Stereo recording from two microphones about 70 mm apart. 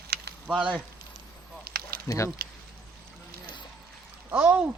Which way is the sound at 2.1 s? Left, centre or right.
Left.